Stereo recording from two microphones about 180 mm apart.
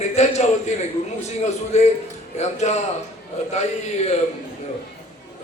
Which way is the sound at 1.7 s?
40° left (ahead or behind).